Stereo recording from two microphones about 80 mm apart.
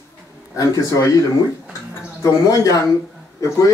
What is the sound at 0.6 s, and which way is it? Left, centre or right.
Speech, left.